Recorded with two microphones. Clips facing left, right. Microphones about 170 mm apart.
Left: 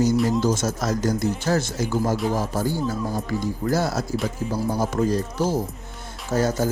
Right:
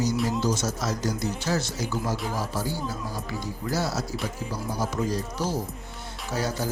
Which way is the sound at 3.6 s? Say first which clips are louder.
Left 4 dB; 50° left (ahead or behind).